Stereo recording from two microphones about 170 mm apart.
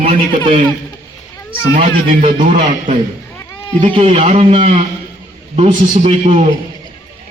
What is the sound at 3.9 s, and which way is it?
Speech, 35° right (ahead or behind).